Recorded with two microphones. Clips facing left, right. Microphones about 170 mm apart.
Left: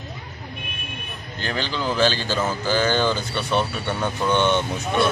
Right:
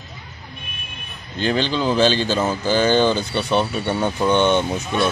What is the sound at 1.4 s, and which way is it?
Speech, 20° right (ahead or behind).